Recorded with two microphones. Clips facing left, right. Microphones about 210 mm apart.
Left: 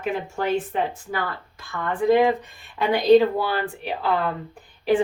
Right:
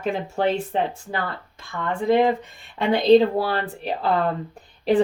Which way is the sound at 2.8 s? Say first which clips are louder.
Even; 30° right (ahead or behind).